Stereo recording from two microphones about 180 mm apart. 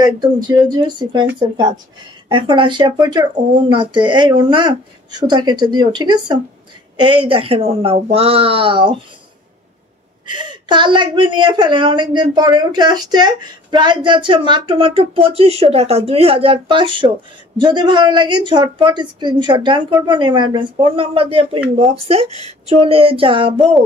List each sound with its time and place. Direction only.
0.0 s a woman's voice: 25° right (ahead or behind)
10.2 s a woman's voice: 25° right (ahead or behind)